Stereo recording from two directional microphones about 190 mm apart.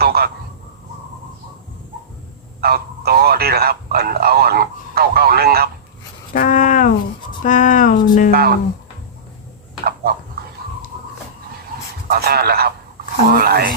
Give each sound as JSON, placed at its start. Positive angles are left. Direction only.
{"t": 0.0, "sound": "a sound", "side_deg": -55}
{"t": 2.6, "sound": "speech", "side_deg": -55}
{"t": 6.3, "sound": "speech", "side_deg": 45}
{"t": 8.3, "sound": "speech", "side_deg": -55}
{"t": 9.8, "sound": "a sound", "side_deg": -55}
{"t": 12.0, "sound": "speech", "side_deg": -55}